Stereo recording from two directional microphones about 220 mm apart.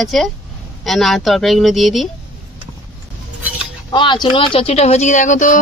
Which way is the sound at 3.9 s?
20° left (ahead or behind).